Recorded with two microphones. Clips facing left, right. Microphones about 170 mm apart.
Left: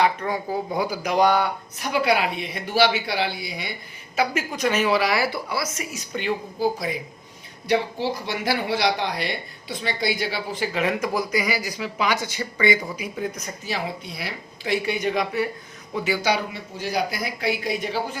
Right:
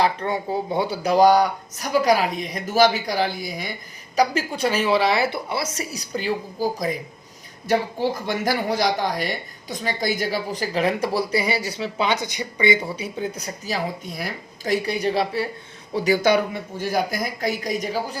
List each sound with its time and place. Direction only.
0.0 s speech: 30° right (ahead or behind)
16.0 s speech: 40° right (ahead or behind)